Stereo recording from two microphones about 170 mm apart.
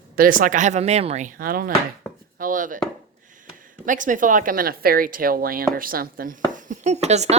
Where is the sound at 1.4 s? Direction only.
60° right (ahead or behind).